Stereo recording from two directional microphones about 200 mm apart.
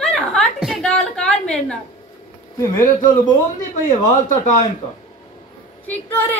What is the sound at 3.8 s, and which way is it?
Speech, 40° left (ahead or behind).